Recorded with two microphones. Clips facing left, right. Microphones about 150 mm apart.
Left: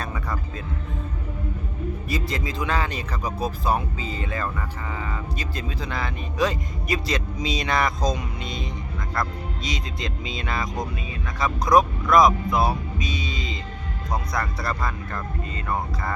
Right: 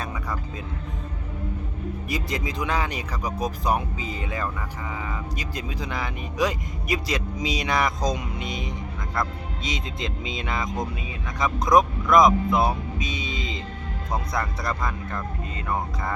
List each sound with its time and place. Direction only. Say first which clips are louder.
2.0 s speech: even; 15° right (ahead or behind)
9.6 s speech: right 1 dB; 20° right (ahead or behind)